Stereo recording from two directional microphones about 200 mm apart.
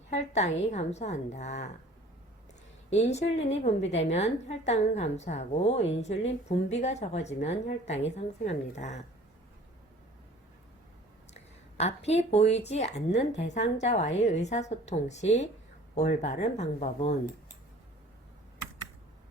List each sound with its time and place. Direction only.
0.1 s a woman's voice: 35° left (ahead or behind)
2.9 s a woman's voice: 35° left (ahead or behind)
11.3 s a woman's voice: 35° left (ahead or behind)